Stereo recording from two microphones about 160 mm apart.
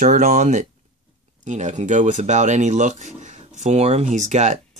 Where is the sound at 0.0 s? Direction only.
50° right (ahead or behind).